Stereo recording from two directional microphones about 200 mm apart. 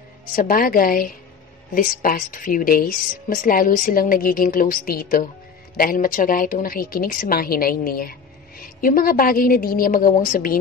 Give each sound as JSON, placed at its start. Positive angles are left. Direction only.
{"t": 0.4, "sound": "speech", "side_deg": 45}